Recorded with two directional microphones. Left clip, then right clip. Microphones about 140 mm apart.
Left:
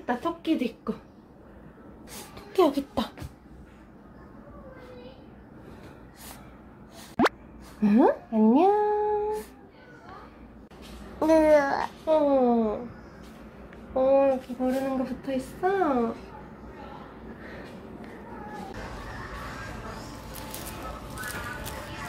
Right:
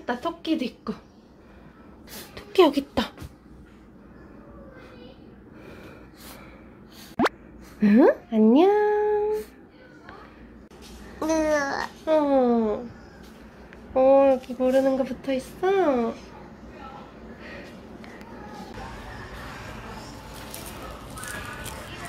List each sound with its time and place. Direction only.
0.0 s speech: 25° right (ahead or behind)
2.3 s a woman's voice: 40° right (ahead or behind)
7.2 s plop: centre (ahead or behind)
7.8 s speech: 45° right (ahead or behind)
11.1 s babbling: 25° left (ahead or behind)
12.1 s speech: 40° right (ahead or behind)
13.9 s speech: 40° right (ahead or behind)